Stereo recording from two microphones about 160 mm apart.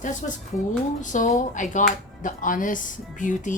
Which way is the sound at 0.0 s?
50° left (ahead or behind).